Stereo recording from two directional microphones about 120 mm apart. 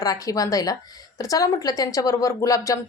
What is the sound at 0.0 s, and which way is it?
Speech, 30° left (ahead or behind).